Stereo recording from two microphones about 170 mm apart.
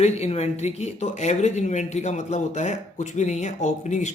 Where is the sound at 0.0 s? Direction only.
40° left (ahead or behind).